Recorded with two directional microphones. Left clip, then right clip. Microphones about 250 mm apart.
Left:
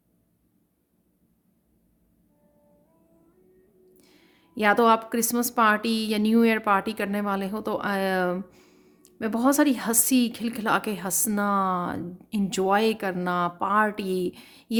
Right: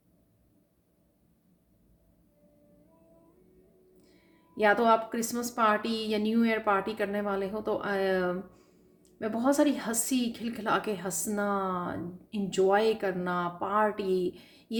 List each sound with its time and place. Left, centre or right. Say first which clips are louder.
3.9 s speech: left 4 dB; left